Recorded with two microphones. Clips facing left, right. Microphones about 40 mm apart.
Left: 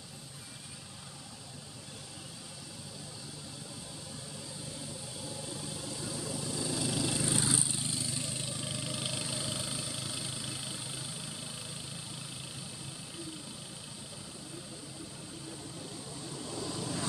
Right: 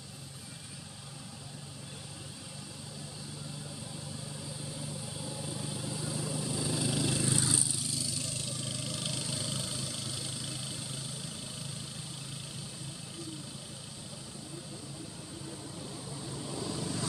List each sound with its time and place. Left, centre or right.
6.0 s vehicle: centre
7.8 s vehicle: left; by 11.1 s centre
16.5 s vehicle: centre